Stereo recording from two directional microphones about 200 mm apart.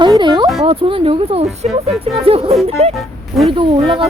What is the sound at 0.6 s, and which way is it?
Speech, 25° right (ahead or behind).